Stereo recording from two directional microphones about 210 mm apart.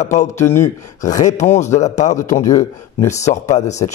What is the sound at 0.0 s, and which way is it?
Speech, 35° left (ahead or behind).